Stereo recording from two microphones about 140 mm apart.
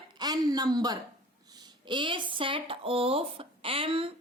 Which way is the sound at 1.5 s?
30° right (ahead or behind).